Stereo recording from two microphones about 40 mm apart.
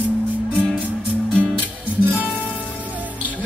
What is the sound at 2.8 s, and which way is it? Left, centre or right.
Music, right.